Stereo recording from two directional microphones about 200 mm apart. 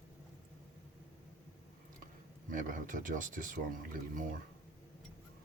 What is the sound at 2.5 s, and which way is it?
Speech, 40° right (ahead or behind).